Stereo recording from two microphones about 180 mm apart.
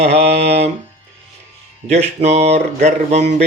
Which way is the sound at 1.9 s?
35° right (ahead or behind).